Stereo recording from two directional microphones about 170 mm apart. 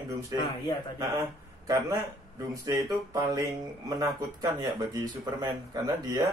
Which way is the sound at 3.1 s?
25° right (ahead or behind).